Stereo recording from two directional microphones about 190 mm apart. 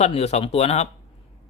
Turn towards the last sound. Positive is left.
turn(degrees=35)  # may be behind; listen again after turning